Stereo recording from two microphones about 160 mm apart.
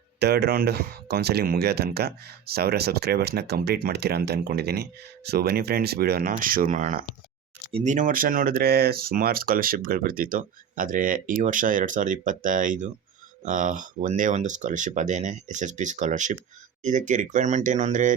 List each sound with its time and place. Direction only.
0.2 s speech: 90° right; by 6.3 s 75° right (ahead or behind)
6.4 s speech: 60° right (ahead or behind)
7.7 s speech: 35° right (ahead or behind)
7.9 s speech: 60° right (ahead or behind)